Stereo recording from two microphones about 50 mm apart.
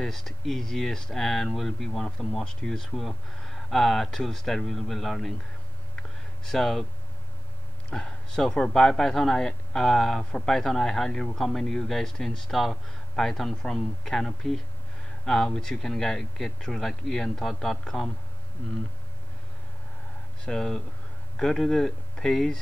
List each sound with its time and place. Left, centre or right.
0.0 s speech: centre
2.0 s speech: centre
6.4 s speech: centre
7.9 s speech: centre
18.6 s speech: left
20.4 s speech: centre